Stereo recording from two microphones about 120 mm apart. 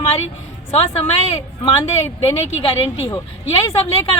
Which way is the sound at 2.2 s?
45° left (ahead or behind).